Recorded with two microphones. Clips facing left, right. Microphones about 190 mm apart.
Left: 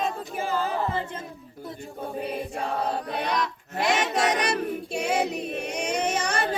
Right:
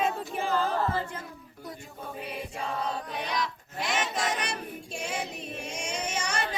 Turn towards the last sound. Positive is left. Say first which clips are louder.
# left 6 dB
turn(degrees=55)  # may be behind; listen again after turning